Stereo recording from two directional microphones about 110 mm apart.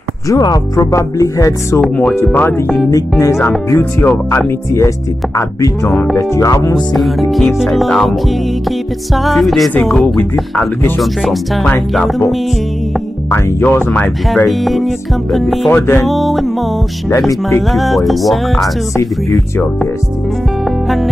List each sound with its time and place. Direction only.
0.3 s speech: 35° left (ahead or behind)
1.8 s speech: 10° left (ahead or behind)
2.9 s speech: 25° left (ahead or behind)
6.9 s music: centre (ahead or behind)
13.3 s speech: 20° left (ahead or behind)
14.3 s music: centre (ahead or behind)
15.7 s speech: 20° left (ahead or behind)
16.1 s music: centre (ahead or behind)
17.3 s speech: 25° left (ahead or behind)
17.6 s music: centre (ahead or behind)